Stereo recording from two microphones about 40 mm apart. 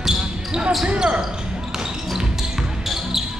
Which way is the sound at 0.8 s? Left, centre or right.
Right.